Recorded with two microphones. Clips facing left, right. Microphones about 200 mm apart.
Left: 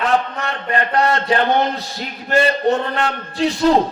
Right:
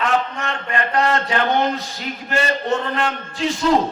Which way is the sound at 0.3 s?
35° left (ahead or behind).